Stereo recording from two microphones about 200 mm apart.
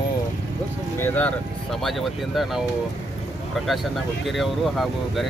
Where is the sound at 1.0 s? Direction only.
10° left (ahead or behind).